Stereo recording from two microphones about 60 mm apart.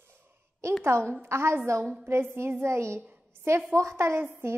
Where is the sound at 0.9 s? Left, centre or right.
Right.